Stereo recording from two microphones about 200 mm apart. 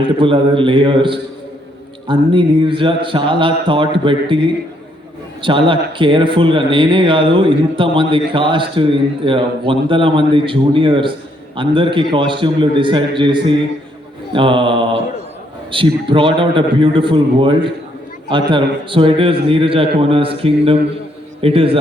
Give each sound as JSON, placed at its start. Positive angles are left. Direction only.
{"t": 0.0, "sound": "a man's voice", "side_deg": -25}